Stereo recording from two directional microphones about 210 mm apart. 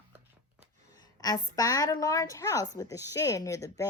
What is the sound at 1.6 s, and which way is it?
A woman's voice, 15° left (ahead or behind).